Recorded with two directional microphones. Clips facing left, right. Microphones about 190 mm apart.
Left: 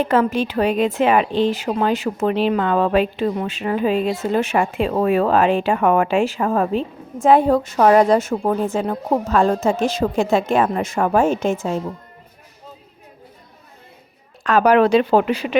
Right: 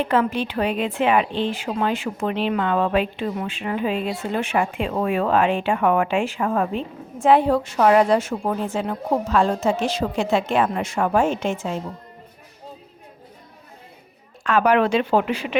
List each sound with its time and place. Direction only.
0.0 s a woman's voice: 40° left (ahead or behind)
14.4 s a woman's voice: 40° left (ahead or behind)